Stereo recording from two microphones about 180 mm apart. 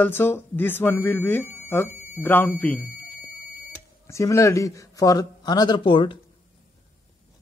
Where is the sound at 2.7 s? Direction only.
10° right (ahead or behind).